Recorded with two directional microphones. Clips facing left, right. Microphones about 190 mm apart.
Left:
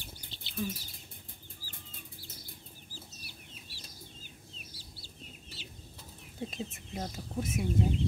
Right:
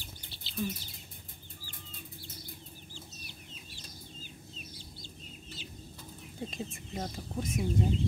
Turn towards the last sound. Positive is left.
turn(degrees=5)  # may be behind; listen again after turning